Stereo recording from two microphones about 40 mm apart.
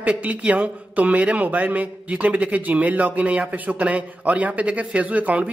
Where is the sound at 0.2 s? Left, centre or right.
Right.